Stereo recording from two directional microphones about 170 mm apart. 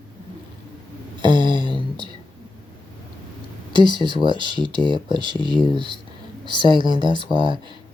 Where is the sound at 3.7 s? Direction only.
30° right (ahead or behind).